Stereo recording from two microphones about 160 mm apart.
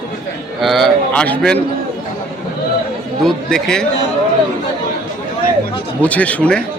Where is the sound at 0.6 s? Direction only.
Centre (ahead or behind).